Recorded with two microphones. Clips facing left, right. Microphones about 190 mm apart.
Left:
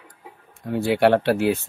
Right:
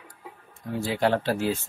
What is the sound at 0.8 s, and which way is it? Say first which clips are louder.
Speech: left 7 dB; 65° left (ahead or behind).